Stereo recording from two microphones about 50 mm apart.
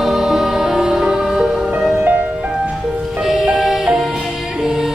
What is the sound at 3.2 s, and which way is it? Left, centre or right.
Music, centre.